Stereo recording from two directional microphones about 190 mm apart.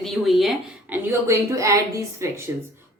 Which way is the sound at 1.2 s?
15° right (ahead or behind).